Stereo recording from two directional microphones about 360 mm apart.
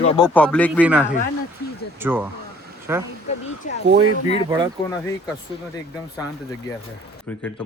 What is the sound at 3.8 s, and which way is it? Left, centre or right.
Speech, right.